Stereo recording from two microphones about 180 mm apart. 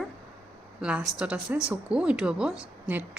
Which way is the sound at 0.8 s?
5° right (ahead or behind).